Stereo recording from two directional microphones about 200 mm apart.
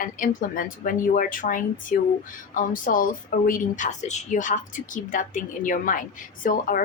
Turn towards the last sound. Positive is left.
turn(degrees=45)  # may be behind; listen again after turning